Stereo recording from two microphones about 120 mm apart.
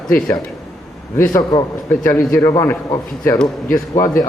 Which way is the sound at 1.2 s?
25° left (ahead or behind).